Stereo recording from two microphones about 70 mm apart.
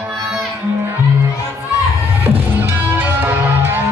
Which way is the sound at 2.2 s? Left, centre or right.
Right.